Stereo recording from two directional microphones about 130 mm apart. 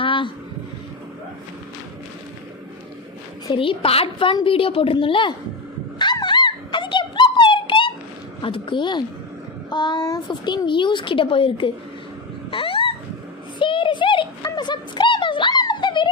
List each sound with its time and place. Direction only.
0.0 s a sound: 40° left (ahead or behind)
3.5 s a woman's voice: 40° left (ahead or behind)
6.0 s dog: 35° left (ahead or behind)
8.4 s a child's voice: 40° left (ahead or behind)
12.5 s dog: 45° left (ahead or behind)
13.6 s a sound: 40° left (ahead or behind)